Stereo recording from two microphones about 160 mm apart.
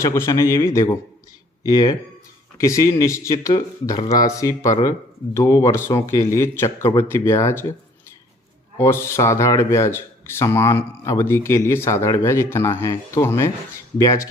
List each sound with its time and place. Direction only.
0.0 s speech: 15° left (ahead or behind)
8.8 s speech: 15° left (ahead or behind)